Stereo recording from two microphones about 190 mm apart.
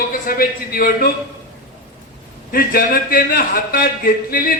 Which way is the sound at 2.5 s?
50° left (ahead or behind).